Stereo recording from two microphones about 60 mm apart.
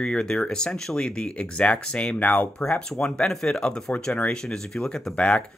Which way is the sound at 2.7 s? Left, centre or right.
Centre.